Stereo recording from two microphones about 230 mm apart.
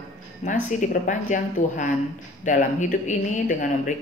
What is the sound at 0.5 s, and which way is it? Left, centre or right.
Speech, left.